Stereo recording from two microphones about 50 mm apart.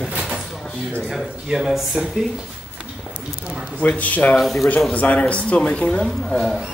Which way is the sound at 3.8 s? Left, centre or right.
Left.